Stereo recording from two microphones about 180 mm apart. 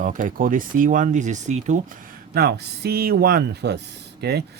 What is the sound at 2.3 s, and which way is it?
Speech, 60° right (ahead or behind).